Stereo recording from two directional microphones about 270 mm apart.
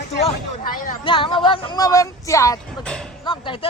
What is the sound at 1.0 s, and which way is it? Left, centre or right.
Speech, centre.